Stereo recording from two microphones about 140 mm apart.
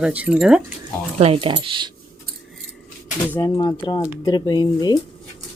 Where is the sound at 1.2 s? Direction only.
40° right (ahead or behind).